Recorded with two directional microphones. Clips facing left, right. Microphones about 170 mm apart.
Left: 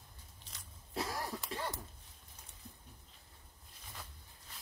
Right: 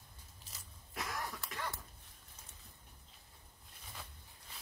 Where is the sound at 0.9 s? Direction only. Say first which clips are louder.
Left 4 dB; 30° left (ahead or behind).